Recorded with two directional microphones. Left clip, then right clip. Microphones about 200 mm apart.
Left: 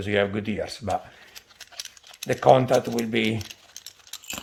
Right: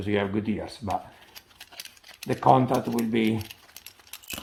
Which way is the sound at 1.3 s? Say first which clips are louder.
Left 5 dB; 15° left (ahead or behind).